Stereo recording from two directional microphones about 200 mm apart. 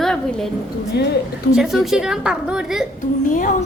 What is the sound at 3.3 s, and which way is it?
Speech, 40° left (ahead or behind).